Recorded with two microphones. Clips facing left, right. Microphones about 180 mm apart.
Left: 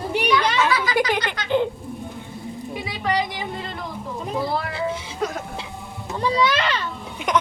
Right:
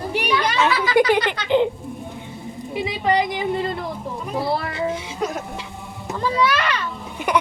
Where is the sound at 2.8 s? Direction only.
25° right (ahead or behind).